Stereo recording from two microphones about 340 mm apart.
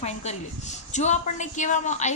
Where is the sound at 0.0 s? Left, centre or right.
Centre.